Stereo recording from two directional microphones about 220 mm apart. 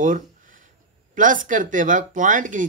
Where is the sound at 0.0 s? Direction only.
35° right (ahead or behind).